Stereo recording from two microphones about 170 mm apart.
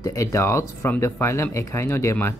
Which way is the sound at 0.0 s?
20° left (ahead or behind).